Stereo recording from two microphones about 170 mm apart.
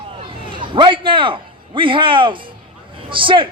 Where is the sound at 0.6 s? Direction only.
30° right (ahead or behind).